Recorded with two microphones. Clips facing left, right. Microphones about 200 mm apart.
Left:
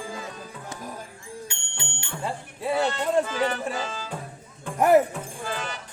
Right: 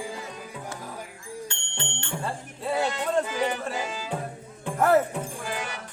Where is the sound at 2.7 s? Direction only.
15° right (ahead or behind).